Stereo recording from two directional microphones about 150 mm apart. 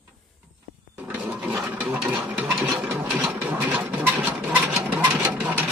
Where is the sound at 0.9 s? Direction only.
10° right (ahead or behind).